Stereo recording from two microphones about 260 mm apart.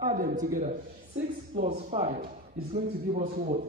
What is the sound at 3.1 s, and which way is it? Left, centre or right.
Speech, right.